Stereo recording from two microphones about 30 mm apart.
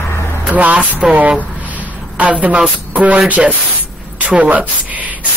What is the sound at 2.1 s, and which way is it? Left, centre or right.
Speech, right.